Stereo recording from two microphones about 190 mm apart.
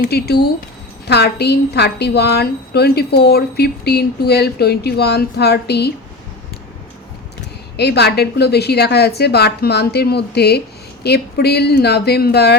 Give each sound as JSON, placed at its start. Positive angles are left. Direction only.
{"t": 0.0, "sound": "a woman's voice", "side_deg": 55}
{"t": 7.8, "sound": "a woman's voice", "side_deg": 60}